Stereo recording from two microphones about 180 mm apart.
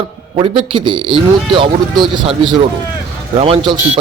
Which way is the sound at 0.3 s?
30° right (ahead or behind).